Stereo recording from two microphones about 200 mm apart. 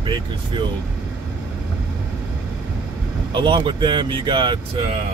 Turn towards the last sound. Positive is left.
turn(degrees=-25)  # may be behind; listen again after turning